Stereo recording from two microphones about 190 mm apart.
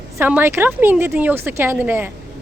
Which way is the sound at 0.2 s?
10° right (ahead or behind).